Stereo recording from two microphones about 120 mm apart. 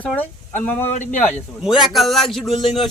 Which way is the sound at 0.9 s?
80° left.